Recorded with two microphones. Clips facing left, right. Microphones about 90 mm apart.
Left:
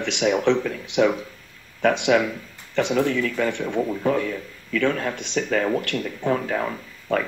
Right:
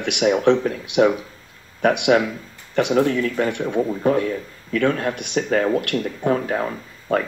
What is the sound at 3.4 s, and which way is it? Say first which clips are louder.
Speech: right 2 dB; 15° right (ahead or behind).